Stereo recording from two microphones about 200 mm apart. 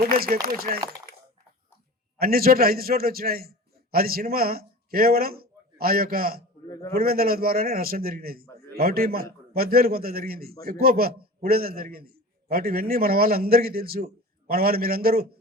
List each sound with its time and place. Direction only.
0.0 s a man's voice: 50° right (ahead or behind)
2.1 s a man's voice: 50° right (ahead or behind)